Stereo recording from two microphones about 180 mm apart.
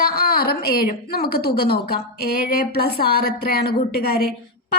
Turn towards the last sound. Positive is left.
turn(degrees=60)  # may be behind; listen again after turning